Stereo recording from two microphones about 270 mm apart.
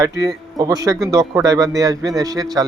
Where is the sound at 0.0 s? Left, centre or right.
Centre.